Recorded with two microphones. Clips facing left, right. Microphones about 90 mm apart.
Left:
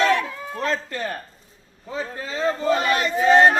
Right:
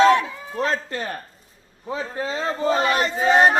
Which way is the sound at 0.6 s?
35° right (ahead or behind).